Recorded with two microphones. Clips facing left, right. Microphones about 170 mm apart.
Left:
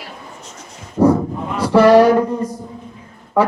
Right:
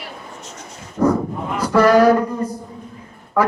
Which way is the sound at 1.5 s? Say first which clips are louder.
Left 4 dB; 30° left (ahead or behind).